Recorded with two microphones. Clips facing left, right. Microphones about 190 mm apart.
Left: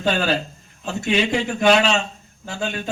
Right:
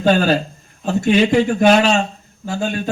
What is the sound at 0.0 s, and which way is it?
Speech, 50° right (ahead or behind).